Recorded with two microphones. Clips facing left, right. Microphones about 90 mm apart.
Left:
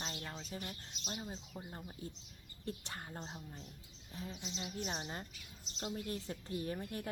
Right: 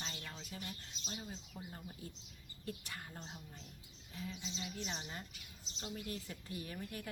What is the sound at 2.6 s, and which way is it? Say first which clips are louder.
Speech: left 2 dB; 35° left (ahead or behind).